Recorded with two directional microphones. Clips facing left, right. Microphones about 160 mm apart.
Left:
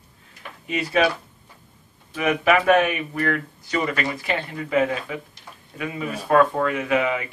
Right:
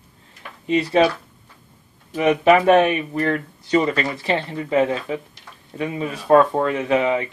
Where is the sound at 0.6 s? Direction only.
30° right (ahead or behind).